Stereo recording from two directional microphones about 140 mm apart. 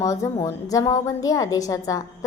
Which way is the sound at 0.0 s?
25° left (ahead or behind).